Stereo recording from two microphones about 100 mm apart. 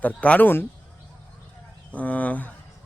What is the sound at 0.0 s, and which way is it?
Speech, 15° left (ahead or behind).